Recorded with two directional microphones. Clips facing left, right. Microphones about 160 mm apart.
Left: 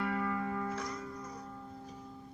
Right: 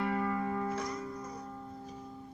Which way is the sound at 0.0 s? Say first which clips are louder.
Right 2 dB; 30° right (ahead or behind).